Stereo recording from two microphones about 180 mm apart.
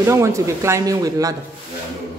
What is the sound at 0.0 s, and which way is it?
Speech, 15° right (ahead or behind).